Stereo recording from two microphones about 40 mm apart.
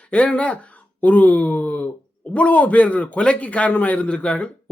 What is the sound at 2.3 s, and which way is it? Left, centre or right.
A man's voice, left.